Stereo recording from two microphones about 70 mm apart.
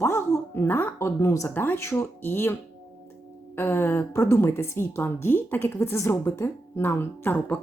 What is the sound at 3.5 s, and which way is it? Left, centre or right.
A woman's voice, left.